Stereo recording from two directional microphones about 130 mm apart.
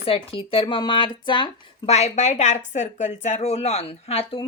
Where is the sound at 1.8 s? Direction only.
55° left (ahead or behind).